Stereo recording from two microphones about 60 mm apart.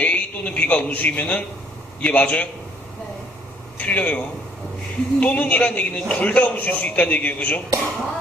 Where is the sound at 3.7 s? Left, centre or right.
Left.